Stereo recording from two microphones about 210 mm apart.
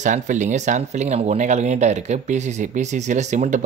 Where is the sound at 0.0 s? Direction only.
35° right (ahead or behind).